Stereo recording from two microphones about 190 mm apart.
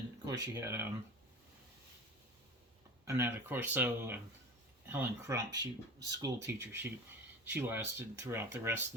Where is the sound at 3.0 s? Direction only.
15° right (ahead or behind).